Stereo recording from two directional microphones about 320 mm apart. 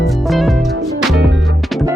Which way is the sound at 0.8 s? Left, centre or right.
Right.